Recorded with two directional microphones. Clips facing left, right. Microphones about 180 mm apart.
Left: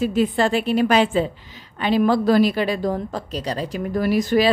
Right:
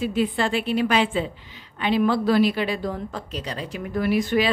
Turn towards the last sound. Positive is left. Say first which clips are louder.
# left 3 dB
turn(degrees=40)  # may be behind; listen again after turning